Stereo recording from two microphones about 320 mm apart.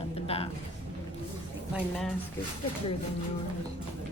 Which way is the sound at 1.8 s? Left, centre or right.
Centre.